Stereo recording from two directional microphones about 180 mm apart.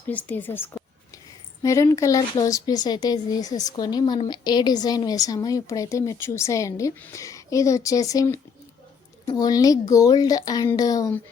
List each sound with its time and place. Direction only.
0.1 s a woman's voice: 10° left (ahead or behind)